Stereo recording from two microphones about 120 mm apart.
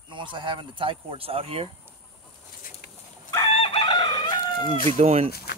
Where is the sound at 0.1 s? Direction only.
45° right (ahead or behind).